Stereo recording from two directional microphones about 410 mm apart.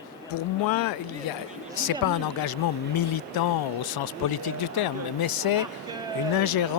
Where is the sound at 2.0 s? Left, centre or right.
Left.